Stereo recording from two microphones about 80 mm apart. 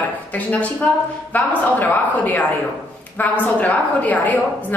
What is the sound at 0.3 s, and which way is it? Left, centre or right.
A woman's voice, centre.